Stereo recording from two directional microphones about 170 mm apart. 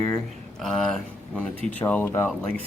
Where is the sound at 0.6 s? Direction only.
Centre (ahead or behind).